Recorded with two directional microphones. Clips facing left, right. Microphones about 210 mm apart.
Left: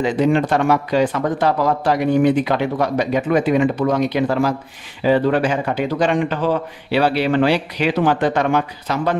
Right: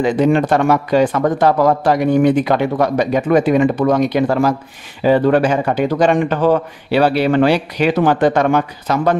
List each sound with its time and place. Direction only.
0.0 s a man's voice: 50° right (ahead or behind)